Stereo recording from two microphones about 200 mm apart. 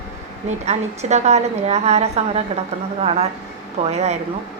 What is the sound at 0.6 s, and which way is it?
Speech, 35° right (ahead or behind).